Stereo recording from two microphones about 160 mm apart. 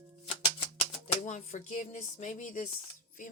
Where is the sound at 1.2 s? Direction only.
50° left (ahead or behind).